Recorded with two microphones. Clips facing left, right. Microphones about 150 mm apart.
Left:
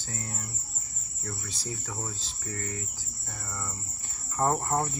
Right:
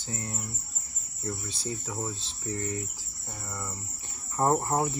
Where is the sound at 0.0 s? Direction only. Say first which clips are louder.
Right 2 dB; 20° right (ahead or behind).